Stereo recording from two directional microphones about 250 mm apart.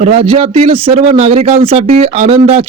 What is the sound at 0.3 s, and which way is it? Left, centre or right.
A man's voice, right.